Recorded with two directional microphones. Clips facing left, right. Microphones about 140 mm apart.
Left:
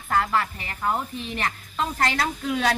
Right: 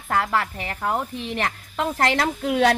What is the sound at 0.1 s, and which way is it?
A woman's voice, 60° right (ahead or behind).